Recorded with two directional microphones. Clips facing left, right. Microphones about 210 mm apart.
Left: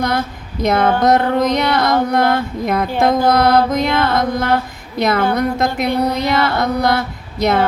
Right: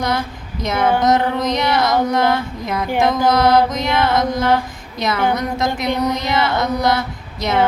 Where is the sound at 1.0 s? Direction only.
60° left (ahead or behind).